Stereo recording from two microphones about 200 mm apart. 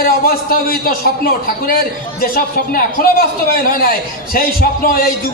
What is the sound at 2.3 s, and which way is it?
A man's voice, 45° left (ahead or behind).